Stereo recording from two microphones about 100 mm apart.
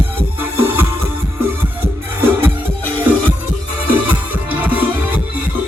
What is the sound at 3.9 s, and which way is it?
Music, 15° right (ahead or behind).